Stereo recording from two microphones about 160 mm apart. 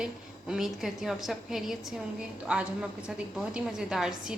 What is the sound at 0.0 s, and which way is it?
A woman's voice, 5° right (ahead or behind).